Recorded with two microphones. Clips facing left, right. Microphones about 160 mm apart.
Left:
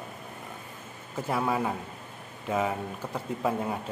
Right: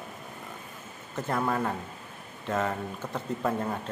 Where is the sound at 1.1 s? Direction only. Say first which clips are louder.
Even; 5° left (ahead or behind).